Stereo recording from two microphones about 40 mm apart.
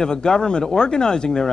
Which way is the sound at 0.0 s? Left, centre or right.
Centre.